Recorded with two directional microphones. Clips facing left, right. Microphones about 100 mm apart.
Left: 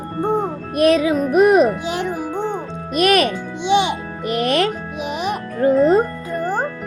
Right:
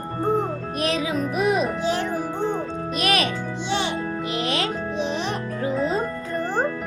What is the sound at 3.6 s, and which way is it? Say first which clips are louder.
Music: left 9 dB; 15° left (ahead or behind).